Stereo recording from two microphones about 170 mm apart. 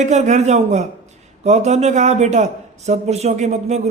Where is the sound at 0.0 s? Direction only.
45° right (ahead or behind).